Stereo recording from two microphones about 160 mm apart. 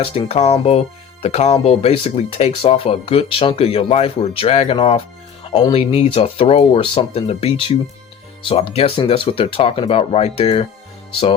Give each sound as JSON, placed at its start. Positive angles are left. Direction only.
{"t": 0.0, "sound": "speech", "side_deg": 40}
{"t": 5.5, "sound": "speech", "side_deg": 25}
{"t": 5.7, "sound": "speech", "side_deg": 40}
{"t": 11.1, "sound": "music", "side_deg": 35}